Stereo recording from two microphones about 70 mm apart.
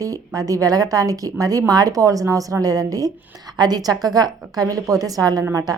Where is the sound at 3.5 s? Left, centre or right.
Right.